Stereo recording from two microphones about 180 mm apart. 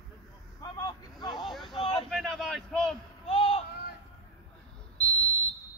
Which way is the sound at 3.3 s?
25° left (ahead or behind).